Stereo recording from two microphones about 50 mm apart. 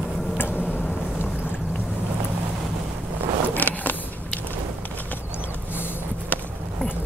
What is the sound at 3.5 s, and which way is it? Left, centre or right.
Vehicle, left.